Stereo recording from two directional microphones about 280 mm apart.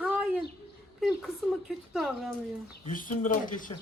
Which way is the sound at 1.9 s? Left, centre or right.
Centre.